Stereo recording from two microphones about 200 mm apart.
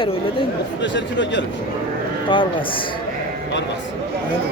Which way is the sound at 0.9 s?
65° left (ahead or behind).